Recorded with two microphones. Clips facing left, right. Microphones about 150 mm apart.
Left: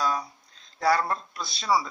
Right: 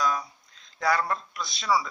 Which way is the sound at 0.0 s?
30° left (ahead or behind).